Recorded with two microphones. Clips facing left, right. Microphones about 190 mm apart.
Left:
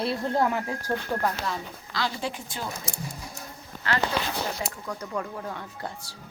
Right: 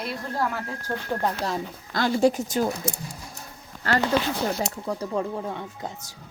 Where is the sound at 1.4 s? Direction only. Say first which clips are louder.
Right 4 dB; 45° right (ahead or behind).